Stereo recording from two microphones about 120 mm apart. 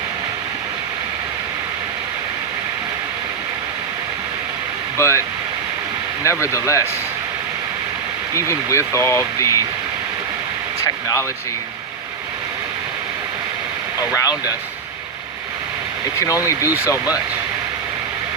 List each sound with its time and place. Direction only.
4.9 s speech: 25° left (ahead or behind)
6.2 s speech: 25° left (ahead or behind)
8.4 s speech: 25° left (ahead or behind)
10.8 s speech: 25° left (ahead or behind)
14.2 s speech: 30° left (ahead or behind)
16.5 s speech: 25° left (ahead or behind)